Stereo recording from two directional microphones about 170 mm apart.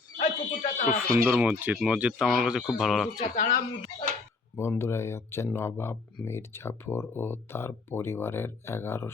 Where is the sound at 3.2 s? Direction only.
50° left (ahead or behind).